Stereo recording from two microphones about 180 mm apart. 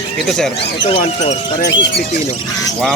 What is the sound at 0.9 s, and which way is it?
Speech, 40° left (ahead or behind).